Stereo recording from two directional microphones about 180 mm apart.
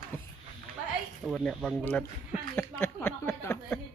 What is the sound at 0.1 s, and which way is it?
Speech, 10° left (ahead or behind).